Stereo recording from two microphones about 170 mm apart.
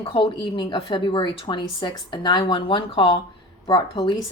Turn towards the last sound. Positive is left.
turn(degrees=30)  # may be behind; listen again after turning